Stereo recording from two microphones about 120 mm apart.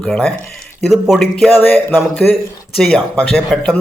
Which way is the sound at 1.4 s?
15° left (ahead or behind).